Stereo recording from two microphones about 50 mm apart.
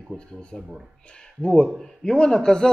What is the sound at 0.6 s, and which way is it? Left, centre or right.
Music, centre.